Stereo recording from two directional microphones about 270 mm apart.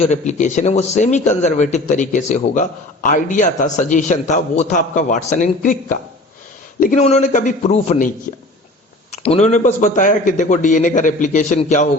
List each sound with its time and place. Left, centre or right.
0.1 s a man's voice: left
9.1 s a man's voice: left